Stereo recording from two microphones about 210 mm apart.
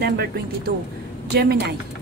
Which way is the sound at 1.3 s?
50° right (ahead or behind).